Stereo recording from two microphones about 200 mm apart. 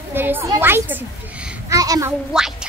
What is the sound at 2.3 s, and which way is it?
Speech, 5° right (ahead or behind).